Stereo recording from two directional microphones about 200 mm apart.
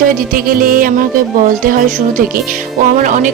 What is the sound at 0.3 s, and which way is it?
Speech, 45° right (ahead or behind).